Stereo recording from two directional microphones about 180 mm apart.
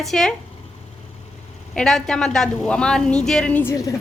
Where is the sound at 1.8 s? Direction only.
5° left (ahead or behind).